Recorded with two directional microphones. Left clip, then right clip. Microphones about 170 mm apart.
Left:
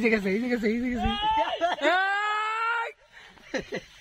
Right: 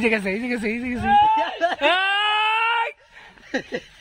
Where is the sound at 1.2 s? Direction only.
55° right (ahead or behind).